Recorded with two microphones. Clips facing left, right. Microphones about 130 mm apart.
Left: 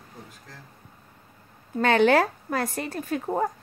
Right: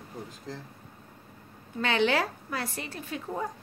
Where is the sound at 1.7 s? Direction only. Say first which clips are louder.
Left 7 dB; 50° left (ahead or behind).